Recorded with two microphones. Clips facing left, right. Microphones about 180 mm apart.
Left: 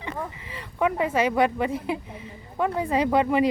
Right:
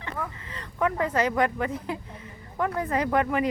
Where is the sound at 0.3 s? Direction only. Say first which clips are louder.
Left 2 dB; 15° left (ahead or behind).